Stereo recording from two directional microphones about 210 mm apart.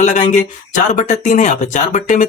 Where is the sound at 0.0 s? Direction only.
35° left (ahead or behind).